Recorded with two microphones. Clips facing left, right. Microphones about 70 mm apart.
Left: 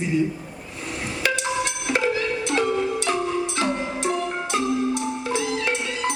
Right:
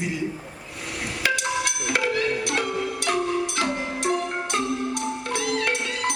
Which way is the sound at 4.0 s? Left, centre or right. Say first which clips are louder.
Even; right.